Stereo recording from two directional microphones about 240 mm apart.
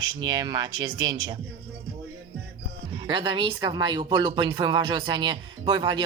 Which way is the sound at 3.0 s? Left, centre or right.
Centre.